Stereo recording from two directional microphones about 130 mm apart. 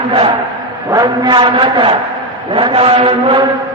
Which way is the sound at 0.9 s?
25° right (ahead or behind).